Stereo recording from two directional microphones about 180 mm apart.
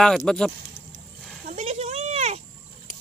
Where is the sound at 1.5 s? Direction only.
35° right (ahead or behind).